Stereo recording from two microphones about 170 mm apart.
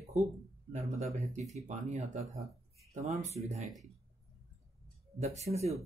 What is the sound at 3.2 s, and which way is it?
Speech, 40° right (ahead or behind).